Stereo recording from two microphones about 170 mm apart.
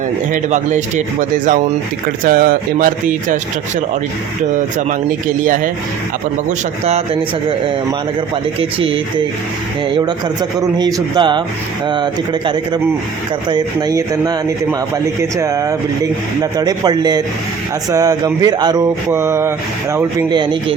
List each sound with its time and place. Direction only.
0.5 s speech: 45° right (ahead or behind)
2.2 s speech: 55° right (ahead or behind)
5.4 s speech: 50° right (ahead or behind)
6.8 s speech: 40° right (ahead or behind)
10.6 s a sound: 20° right (ahead or behind)